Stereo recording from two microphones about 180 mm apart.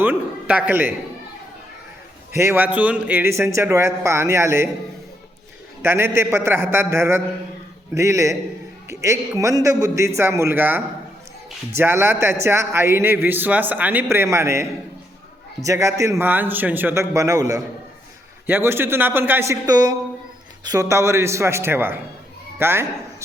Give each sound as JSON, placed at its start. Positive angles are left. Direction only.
{"t": 0.0, "sound": "a man's voice", "side_deg": -10}
{"t": 2.3, "sound": "a man's voice", "side_deg": -15}
{"t": 5.8, "sound": "a man's voice", "side_deg": -15}